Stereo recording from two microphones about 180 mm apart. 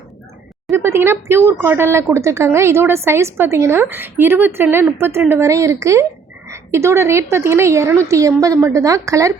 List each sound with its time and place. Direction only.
0.7 s speech: 15° right (ahead or behind)